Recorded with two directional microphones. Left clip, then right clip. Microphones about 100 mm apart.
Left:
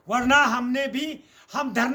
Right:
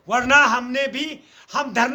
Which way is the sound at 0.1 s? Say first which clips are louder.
Right 4 dB; 15° right (ahead or behind).